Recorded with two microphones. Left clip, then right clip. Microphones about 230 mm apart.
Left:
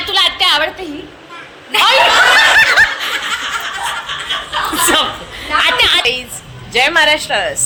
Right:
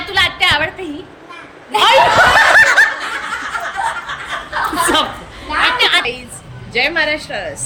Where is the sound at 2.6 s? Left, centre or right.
Centre.